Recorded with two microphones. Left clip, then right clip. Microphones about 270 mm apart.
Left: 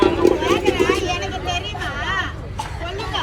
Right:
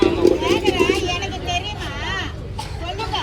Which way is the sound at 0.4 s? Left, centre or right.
Centre.